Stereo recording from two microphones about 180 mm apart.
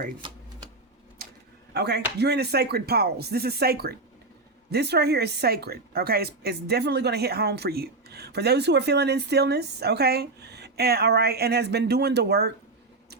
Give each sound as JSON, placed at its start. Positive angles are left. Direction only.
{"t": 0.2, "sound": "typewriter", "side_deg": -25}
{"t": 1.7, "sound": "a woman's voice", "side_deg": -65}